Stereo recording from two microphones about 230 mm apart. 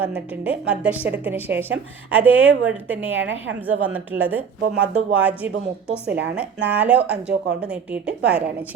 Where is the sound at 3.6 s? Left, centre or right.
Centre.